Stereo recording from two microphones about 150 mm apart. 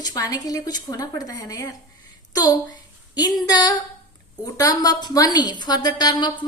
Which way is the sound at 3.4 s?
25° left (ahead or behind).